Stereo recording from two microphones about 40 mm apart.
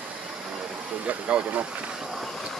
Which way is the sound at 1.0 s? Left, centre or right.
Right.